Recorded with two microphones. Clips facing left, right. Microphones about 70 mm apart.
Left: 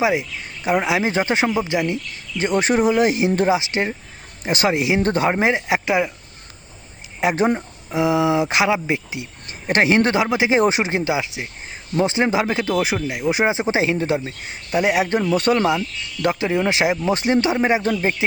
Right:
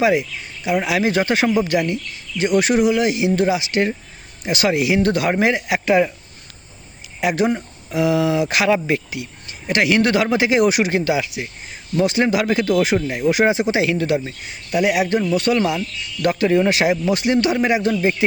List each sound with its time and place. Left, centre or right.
0.0 s speech: centre
0.6 s speech: left
0.9 s speech: left
7.2 s speech: left
9.5 s speech: left
16.2 s speech: centre